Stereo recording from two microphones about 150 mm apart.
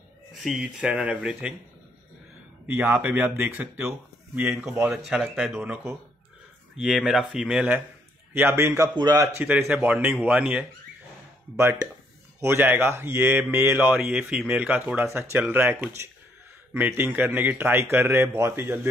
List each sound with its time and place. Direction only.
0.3 s speech: centre (ahead or behind)
2.7 s a man's voice: 15° right (ahead or behind)
5.6 s a man's voice: 10° right (ahead or behind)
9.4 s a man's voice: 10° right (ahead or behind)